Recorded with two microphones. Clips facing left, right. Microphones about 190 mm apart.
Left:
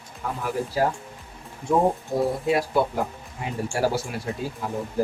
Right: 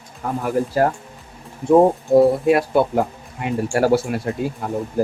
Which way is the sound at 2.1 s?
60° right (ahead or behind).